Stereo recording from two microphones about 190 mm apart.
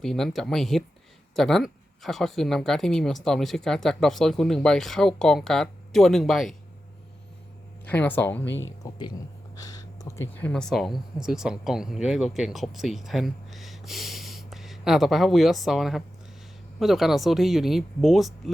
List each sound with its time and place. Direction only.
0.0 s speech: centre (ahead or behind)
7.9 s speech: 10° left (ahead or behind)
8.8 s speech: 20° left (ahead or behind); by 18.5 s centre (ahead or behind)